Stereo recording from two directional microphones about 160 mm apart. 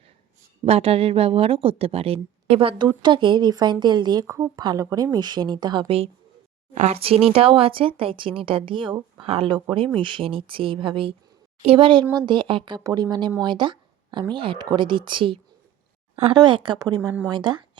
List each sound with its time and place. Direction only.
0.6 s speech: 35° right (ahead or behind)